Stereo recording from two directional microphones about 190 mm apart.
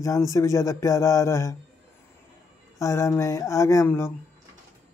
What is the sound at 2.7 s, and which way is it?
Speech, 15° left (ahead or behind).